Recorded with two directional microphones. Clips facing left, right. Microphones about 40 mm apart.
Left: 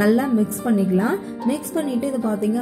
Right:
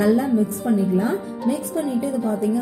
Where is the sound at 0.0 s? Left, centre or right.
Left.